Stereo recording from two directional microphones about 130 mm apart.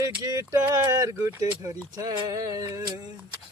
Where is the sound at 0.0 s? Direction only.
25° right (ahead or behind).